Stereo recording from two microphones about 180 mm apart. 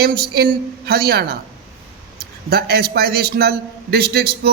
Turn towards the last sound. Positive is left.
turn(degrees=-60)  # may be behind; listen again after turning